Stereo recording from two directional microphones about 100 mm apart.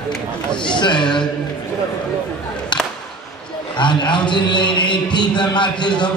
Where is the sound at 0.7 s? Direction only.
50° left (ahead or behind).